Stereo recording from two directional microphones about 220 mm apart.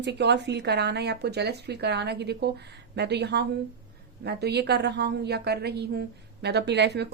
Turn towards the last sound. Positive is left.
turn(degrees=-50)  # may be behind; listen again after turning